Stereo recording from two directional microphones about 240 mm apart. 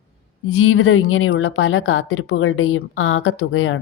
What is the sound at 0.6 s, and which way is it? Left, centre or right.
A woman's voice, left.